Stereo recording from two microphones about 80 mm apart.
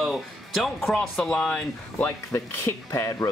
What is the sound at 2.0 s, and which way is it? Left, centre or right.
Speech, left.